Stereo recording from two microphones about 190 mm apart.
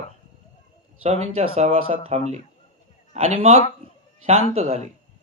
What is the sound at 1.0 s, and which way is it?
A man's voice, 35° right (ahead or behind).